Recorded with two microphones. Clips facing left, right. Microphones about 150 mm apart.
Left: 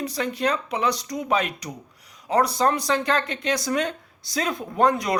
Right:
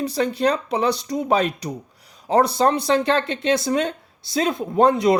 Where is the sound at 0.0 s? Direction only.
30° right (ahead or behind).